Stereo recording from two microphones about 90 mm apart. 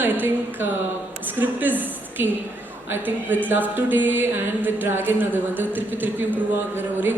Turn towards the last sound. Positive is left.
turn(degrees=-20)  # may be behind; listen again after turning